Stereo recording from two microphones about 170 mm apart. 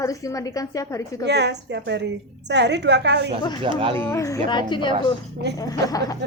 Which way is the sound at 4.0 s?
15° left (ahead or behind).